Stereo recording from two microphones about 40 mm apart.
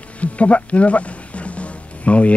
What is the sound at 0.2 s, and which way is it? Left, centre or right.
Music, left.